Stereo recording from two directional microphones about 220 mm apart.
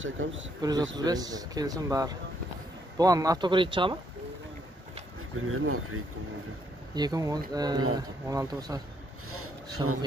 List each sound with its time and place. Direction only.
0.0 s speech: 60° right (ahead or behind)
0.6 s speech: 15° right (ahead or behind)
5.5 s speech: 75° right (ahead or behind)
7.0 s speech: 15° right (ahead or behind)